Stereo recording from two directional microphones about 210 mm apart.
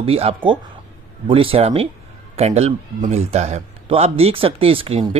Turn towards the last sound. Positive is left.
turn(degrees=-25)  # may be behind; listen again after turning